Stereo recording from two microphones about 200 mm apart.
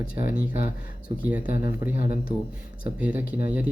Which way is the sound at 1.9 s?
45° left (ahead or behind).